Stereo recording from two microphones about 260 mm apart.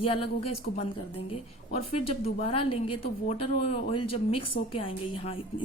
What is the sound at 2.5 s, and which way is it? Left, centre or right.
A woman's voice, left.